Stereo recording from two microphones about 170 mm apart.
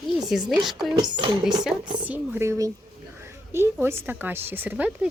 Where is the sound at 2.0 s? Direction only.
10° right (ahead or behind).